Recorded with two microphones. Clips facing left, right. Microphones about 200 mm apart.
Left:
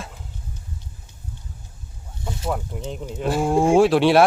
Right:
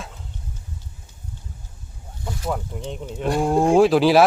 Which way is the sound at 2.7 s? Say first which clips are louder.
Even; centre (ahead or behind).